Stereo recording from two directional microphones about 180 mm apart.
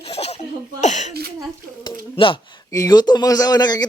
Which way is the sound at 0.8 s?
40° left (ahead or behind).